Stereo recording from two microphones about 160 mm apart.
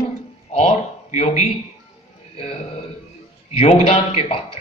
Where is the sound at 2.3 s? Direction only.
40° left (ahead or behind).